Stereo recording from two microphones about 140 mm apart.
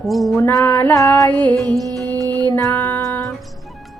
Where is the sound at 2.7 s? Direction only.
15° left (ahead or behind).